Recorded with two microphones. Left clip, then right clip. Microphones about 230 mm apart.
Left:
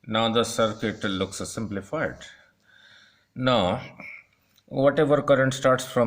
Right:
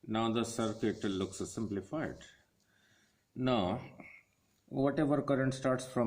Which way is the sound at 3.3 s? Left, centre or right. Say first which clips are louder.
Left 11 dB; left.